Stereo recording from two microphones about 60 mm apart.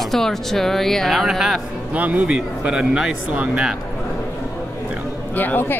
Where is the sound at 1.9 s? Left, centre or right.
Right.